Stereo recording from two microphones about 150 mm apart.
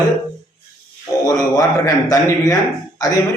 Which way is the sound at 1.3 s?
25° left (ahead or behind).